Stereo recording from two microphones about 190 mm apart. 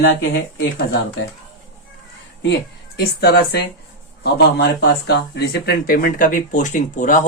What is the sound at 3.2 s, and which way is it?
Speech, 55° left (ahead or behind).